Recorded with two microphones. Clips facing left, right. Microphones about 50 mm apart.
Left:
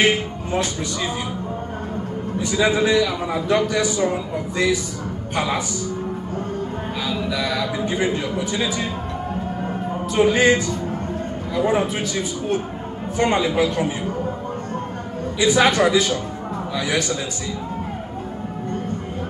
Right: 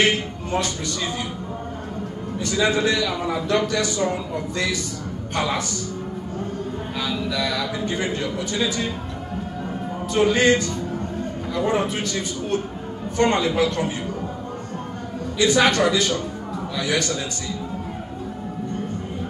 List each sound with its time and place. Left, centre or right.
0.0 s speech: centre
2.4 s a man's voice: centre
7.1 s a man's voice: centre
10.1 s a man's voice: centre
15.3 s a man's voice: centre